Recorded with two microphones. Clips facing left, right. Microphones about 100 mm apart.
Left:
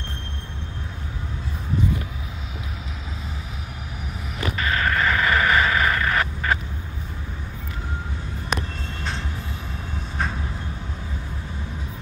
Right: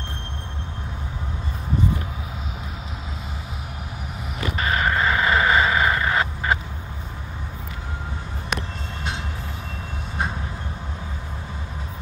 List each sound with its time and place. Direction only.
4.6 s vehicle: 25° right (ahead or behind)